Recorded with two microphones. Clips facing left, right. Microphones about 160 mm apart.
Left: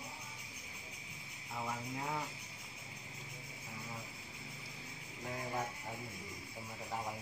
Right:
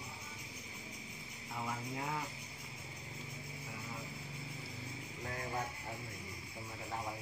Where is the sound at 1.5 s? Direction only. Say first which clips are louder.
Even; 5° left (ahead or behind).